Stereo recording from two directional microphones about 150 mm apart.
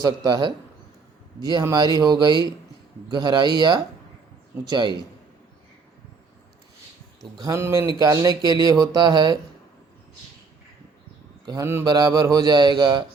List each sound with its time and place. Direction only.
0.0 s a man's voice: 30° right (ahead or behind)
7.3 s speech: 20° right (ahead or behind)
11.6 s speech: 15° right (ahead or behind)
11.9 s speech: 25° right (ahead or behind)